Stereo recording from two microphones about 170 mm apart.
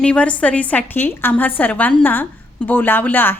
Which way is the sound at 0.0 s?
5° left (ahead or behind).